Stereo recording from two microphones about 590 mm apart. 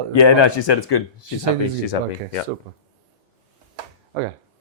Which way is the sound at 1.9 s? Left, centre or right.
Left.